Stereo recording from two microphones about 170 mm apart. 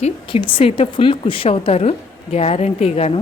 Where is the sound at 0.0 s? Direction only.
30° left (ahead or behind).